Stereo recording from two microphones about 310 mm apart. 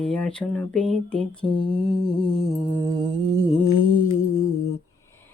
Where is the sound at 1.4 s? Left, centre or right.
Centre.